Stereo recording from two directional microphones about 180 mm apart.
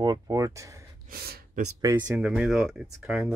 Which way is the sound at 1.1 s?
60° right (ahead or behind).